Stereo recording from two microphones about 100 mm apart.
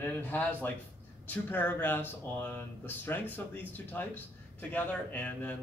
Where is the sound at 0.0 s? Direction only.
20° left (ahead or behind).